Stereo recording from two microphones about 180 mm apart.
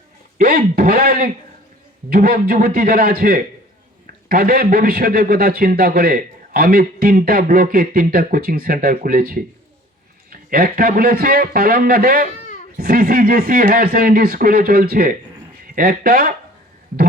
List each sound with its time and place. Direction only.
0.3 s a man's voice: 55° right (ahead or behind)